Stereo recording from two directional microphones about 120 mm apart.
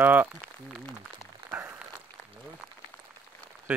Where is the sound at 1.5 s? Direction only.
20° right (ahead or behind).